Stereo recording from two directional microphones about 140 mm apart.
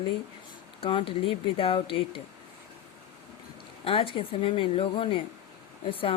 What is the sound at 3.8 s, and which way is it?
Speech, 40° left (ahead or behind).